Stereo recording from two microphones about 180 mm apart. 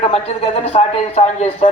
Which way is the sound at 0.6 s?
35° left (ahead or behind).